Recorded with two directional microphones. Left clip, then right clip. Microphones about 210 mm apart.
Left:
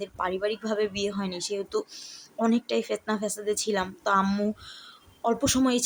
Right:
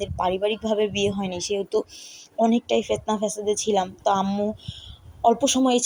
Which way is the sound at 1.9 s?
Centre (ahead or behind).